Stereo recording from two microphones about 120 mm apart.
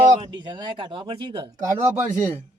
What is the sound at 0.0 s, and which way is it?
Speech, 40° right (ahead or behind).